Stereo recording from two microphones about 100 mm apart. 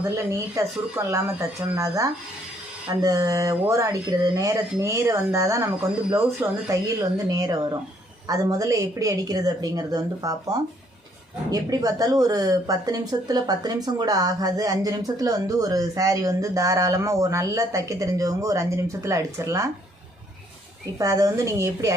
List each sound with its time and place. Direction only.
0.3 s a woman's voice: 30° right (ahead or behind)
21.0 s a woman's voice: 35° right (ahead or behind)